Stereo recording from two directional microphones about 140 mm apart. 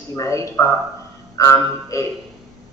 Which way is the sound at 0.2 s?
20° left (ahead or behind).